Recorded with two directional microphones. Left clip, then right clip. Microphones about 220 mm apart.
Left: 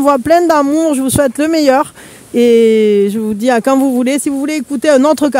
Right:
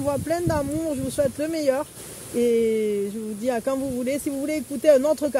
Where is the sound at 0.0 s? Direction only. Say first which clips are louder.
Left 15 dB; 50° left (ahead or behind).